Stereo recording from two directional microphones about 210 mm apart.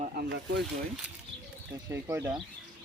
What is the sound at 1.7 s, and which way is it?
Speech, 15° right (ahead or behind).